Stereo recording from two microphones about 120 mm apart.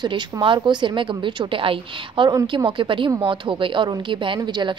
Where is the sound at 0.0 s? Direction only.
40° right (ahead or behind).